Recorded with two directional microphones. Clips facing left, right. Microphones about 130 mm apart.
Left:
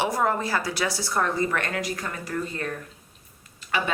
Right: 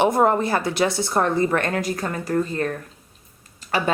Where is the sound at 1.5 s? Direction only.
40° right (ahead or behind).